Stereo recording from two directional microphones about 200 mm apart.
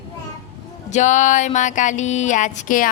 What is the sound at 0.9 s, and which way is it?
Music, 35° left (ahead or behind).